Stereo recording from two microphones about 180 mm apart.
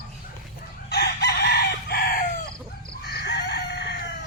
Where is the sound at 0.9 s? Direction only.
65° left (ahead or behind).